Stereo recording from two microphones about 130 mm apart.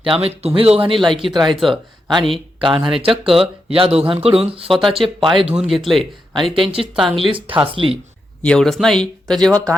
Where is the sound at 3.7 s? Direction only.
50° right (ahead or behind).